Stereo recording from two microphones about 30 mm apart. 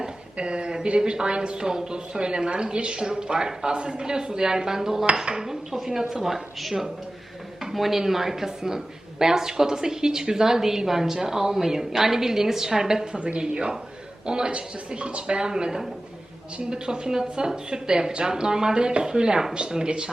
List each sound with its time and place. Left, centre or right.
0.3 s a sound: right
0.9 s a woman's voice: right
3.1 s a woman's voice: right
5.5 s a woman's voice: centre
13.1 s a woman's voice: right
15.4 s a woman's voice: right